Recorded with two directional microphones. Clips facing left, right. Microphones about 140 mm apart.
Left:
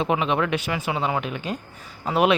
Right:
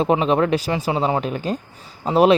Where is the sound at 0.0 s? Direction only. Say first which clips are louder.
Right 5 dB; 35° right (ahead or behind).